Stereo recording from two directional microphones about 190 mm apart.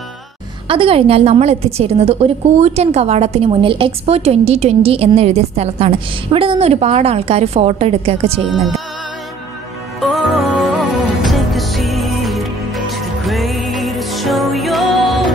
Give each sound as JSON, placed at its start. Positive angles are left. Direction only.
{"t": 0.7, "sound": "a woman's voice", "side_deg": -30}
{"t": 9.9, "sound": "music", "side_deg": 0}